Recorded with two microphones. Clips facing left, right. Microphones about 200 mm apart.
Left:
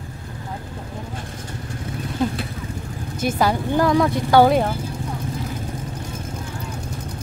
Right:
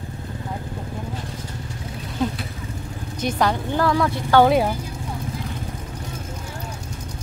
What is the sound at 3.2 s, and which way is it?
Speech, 5° left (ahead or behind).